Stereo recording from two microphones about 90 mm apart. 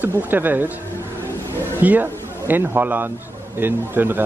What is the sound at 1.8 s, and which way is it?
Speech, 20° right (ahead or behind).